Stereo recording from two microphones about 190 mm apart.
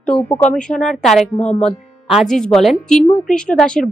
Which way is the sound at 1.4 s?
35° left (ahead or behind).